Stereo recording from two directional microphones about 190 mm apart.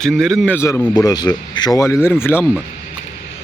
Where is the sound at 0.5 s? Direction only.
10° left (ahead or behind).